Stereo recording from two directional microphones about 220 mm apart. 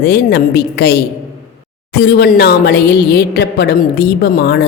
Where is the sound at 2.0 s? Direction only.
50° left (ahead or behind).